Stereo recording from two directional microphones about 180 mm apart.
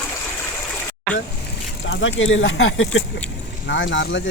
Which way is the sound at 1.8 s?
90° left.